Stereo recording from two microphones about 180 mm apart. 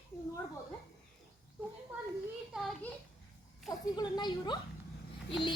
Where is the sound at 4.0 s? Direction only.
25° left (ahead or behind).